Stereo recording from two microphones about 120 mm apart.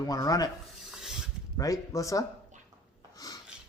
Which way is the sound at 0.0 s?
30° left (ahead or behind).